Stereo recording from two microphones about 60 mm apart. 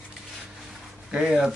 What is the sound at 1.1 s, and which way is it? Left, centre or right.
Speech, centre.